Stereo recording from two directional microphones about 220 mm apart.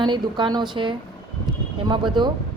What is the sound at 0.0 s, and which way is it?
A woman's voice, 20° right (ahead or behind).